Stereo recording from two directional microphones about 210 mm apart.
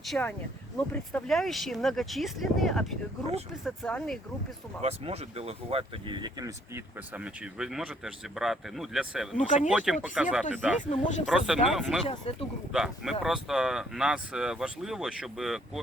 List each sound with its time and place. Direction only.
0.1 s speech: 5° left (ahead or behind)
4.8 s speech: 30° right (ahead or behind); by 10.8 s 5° right (ahead or behind)
10.8 s speech: 30° left (ahead or behind)
11.3 s speech: centre (ahead or behind)